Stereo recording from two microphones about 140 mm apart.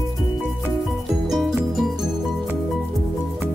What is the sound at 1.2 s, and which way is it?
Music, centre (ahead or behind).